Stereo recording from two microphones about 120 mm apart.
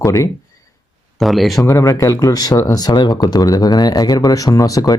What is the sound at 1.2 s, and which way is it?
Speech, centre (ahead or behind).